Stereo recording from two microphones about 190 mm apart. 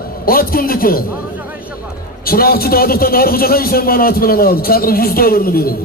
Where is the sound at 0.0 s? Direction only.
50° left (ahead or behind).